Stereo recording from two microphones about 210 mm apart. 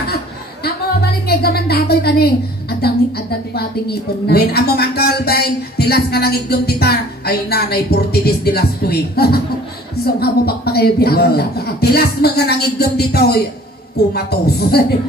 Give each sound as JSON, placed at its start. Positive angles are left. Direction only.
{"t": 1.2, "sound": "speech", "side_deg": 50}